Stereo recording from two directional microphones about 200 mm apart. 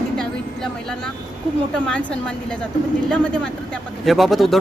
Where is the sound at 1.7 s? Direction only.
5° left (ahead or behind).